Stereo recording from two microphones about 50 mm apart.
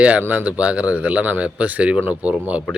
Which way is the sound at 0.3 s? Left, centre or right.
Right.